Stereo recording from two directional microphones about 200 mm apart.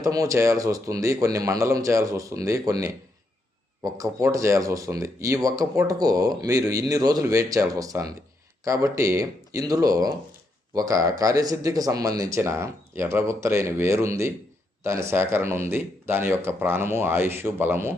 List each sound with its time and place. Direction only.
0.0 s speech: 15° right (ahead or behind)